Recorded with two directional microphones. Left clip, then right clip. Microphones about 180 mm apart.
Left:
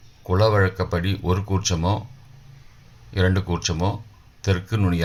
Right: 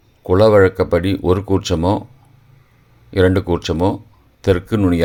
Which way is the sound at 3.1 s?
50° right (ahead or behind).